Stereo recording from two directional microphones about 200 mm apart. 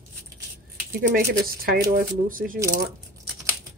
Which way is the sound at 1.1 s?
50° right (ahead or behind).